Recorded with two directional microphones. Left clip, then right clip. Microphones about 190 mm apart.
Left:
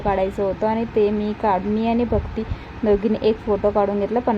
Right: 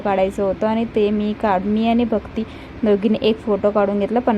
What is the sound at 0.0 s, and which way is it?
A woman's voice, 20° right (ahead or behind).